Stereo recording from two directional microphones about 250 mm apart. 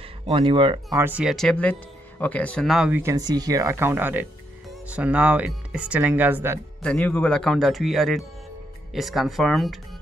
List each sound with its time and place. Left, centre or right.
0.3 s speech: right
0.9 s speech: centre
6.8 s speech: centre